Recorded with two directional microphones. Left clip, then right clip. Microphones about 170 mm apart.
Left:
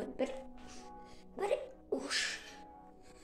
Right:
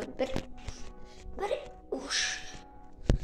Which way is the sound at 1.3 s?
Centre (ahead or behind).